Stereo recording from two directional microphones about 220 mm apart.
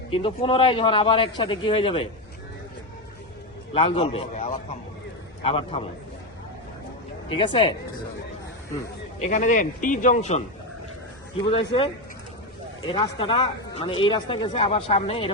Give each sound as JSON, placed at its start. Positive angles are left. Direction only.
{"t": 0.1, "sound": "speech", "side_deg": 25}
{"t": 3.8, "sound": "a man's voice", "side_deg": 25}
{"t": 7.3, "sound": "speech", "side_deg": 25}
{"t": 9.1, "sound": "speech", "side_deg": 30}
{"t": 11.4, "sound": "speech", "side_deg": 25}
{"t": 12.9, "sound": "speech", "side_deg": 25}